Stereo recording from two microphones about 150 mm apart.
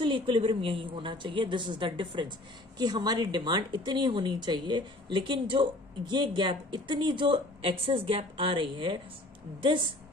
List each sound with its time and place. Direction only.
0.0 s speech: 35° right (ahead or behind)